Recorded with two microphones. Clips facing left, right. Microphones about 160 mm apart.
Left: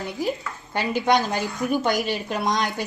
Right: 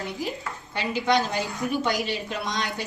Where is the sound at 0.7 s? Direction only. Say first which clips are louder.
Left 3 dB; 45° left (ahead or behind).